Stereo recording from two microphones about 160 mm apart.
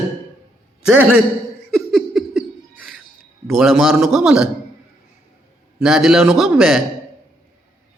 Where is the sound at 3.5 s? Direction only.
Centre (ahead or behind).